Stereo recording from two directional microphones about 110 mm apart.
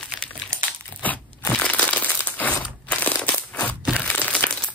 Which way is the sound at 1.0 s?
15° left (ahead or behind).